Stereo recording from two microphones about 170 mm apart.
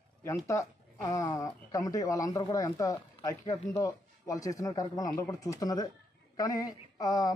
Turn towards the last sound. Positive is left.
turn(degrees=20)  # may be behind; listen again after turning